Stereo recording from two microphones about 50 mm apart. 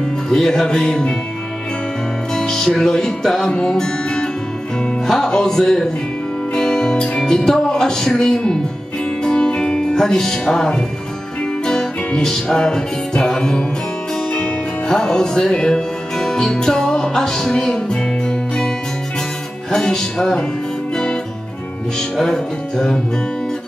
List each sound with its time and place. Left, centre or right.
0.3 s music: centre
2.3 s music: centre
6.5 s speech: centre
9.2 s music: centre
14.9 s music: centre
19.7 s music: centre
22.2 s music: centre